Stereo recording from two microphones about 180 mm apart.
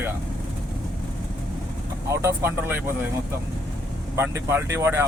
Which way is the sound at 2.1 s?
15° right (ahead or behind).